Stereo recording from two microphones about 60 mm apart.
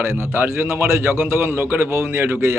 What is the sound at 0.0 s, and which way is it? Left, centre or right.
A man's voice, right.